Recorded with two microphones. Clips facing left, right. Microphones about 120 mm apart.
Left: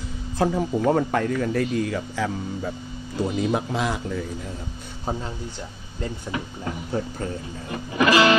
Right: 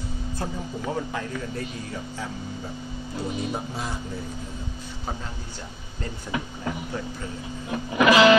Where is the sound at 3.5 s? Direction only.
90° left.